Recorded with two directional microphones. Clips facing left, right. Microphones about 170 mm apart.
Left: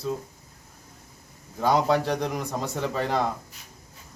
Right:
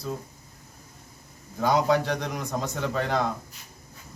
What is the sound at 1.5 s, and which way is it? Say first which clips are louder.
A man's voice: even; centre (ahead or behind).